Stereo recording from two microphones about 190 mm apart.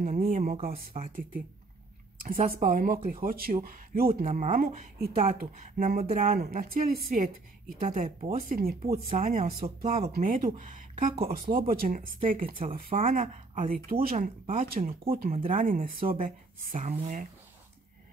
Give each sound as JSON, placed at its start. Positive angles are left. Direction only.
{"t": 0.0, "sound": "speech", "side_deg": -35}
{"t": 4.1, "sound": "speech", "side_deg": -35}
{"t": 4.6, "sound": "speech", "side_deg": -55}
{"t": 6.4, "sound": "speech", "side_deg": -50}
{"t": 7.9, "sound": "speech", "side_deg": -35}
{"t": 8.4, "sound": "speech", "side_deg": -50}
{"t": 9.1, "sound": "speech", "side_deg": -35}